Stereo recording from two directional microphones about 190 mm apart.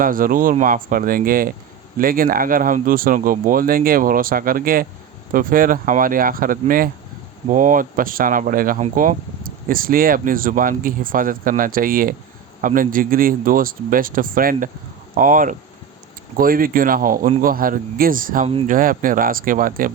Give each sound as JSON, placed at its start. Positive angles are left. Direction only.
{"t": 0.0, "sound": "speech", "side_deg": -45}